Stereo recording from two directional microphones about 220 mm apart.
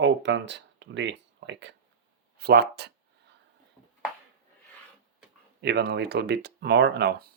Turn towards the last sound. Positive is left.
turn(degrees=-45)  # may be behind; listen again after turning